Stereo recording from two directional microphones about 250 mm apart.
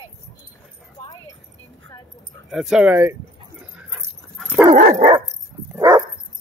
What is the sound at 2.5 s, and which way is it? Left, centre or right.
Speech, centre.